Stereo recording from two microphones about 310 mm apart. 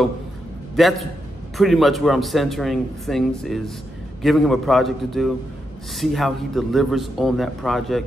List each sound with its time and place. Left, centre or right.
0.7 s a man's voice: centre